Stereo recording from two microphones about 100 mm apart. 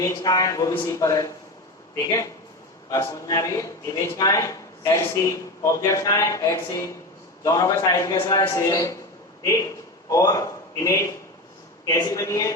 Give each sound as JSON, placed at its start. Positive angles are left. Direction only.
{"t": 0.1, "sound": "a man's voice", "side_deg": 40}